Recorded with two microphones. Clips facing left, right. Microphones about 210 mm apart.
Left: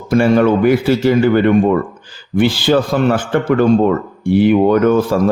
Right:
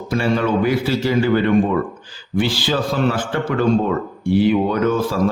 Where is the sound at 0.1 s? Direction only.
50° left (ahead or behind).